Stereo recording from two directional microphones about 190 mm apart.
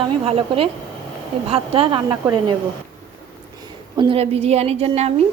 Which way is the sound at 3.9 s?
30° right (ahead or behind).